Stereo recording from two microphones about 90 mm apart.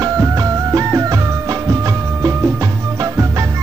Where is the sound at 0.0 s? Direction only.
35° right (ahead or behind).